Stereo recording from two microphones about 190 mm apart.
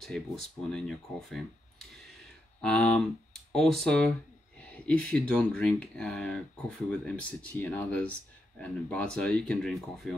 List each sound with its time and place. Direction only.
0.7 s speech: centre (ahead or behind)